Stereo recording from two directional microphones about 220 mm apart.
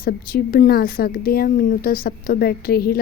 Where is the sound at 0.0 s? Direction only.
40° left (ahead or behind).